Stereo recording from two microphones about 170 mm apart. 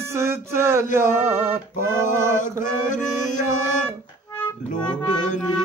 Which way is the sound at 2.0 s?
45° left (ahead or behind).